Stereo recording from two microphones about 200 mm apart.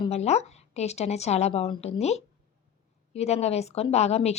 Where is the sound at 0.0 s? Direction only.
30° left (ahead or behind).